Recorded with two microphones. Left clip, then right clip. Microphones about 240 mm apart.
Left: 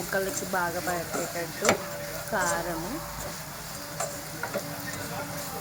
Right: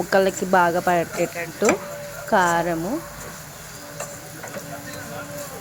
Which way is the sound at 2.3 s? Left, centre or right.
Right.